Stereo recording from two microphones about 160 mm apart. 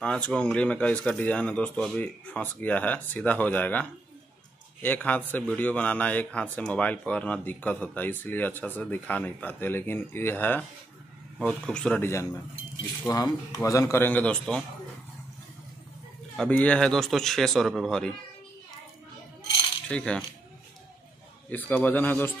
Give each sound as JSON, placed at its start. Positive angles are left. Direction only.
{"t": 0.0, "sound": "speech", "side_deg": 5}
{"t": 4.8, "sound": "speech", "side_deg": 10}
{"t": 16.3, "sound": "a man's voice", "side_deg": 10}
{"t": 19.9, "sound": "a man's voice", "side_deg": 5}
{"t": 21.5, "sound": "speech", "side_deg": 10}